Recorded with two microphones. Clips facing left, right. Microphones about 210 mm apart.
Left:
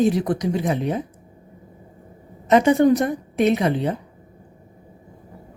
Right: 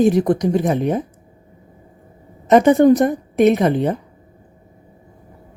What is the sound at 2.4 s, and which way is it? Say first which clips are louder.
A woman's voice: right 4 dB; 50° right (ahead or behind).